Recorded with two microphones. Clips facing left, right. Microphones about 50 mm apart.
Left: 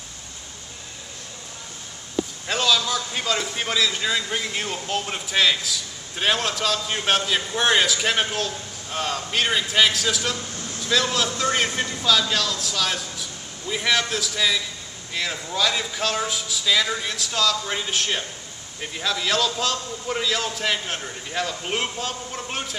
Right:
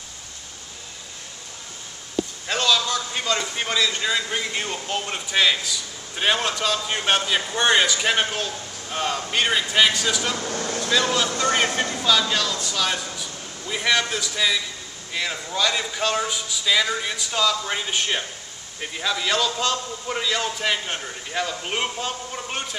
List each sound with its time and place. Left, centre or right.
2.4 s a man's voice: centre
10.3 s a sound: right
11.3 s a man's voice: centre
11.7 s speech: right
12.0 s a man's voice: centre